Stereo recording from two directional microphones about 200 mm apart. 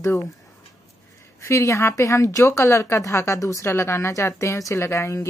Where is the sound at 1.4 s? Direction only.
15° left (ahead or behind).